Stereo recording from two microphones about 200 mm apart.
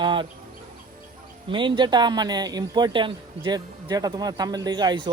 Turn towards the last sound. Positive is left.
turn(degrees=-20)  # may be behind; listen again after turning